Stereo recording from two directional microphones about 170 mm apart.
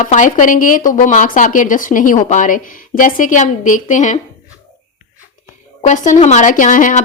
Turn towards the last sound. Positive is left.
turn(degrees=50)  # may be behind; listen again after turning